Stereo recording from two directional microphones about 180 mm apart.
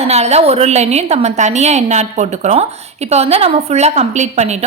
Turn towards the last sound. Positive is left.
turn(degrees=-40)  # may be behind; listen again after turning